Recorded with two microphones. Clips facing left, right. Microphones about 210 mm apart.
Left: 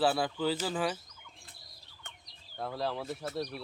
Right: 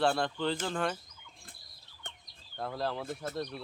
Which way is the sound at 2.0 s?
35° right (ahead or behind).